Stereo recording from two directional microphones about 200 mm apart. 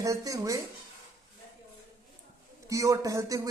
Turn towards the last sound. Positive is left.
turn(degrees=-15)  # may be behind; listen again after turning